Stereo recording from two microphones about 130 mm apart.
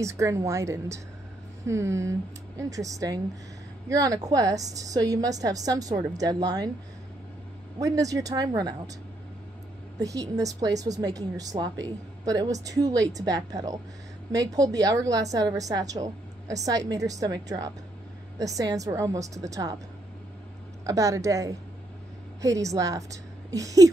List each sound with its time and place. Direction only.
0.0 s a woman's voice: 20° right (ahead or behind)
7.8 s a woman's voice: 25° right (ahead or behind)
9.9 s a woman's voice: 25° right (ahead or behind)
20.8 s a woman's voice: 25° right (ahead or behind)